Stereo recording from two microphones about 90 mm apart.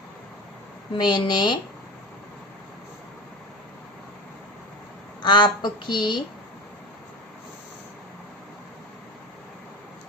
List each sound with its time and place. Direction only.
0.9 s a woman's voice: 55° left (ahead or behind)
5.2 s a woman's voice: 60° left (ahead or behind)